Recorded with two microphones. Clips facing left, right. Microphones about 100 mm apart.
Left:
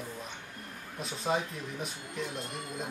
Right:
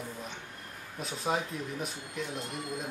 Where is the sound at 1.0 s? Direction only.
Centre (ahead or behind).